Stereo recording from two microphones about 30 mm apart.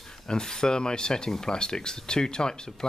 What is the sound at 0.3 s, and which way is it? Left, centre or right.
Speech, left.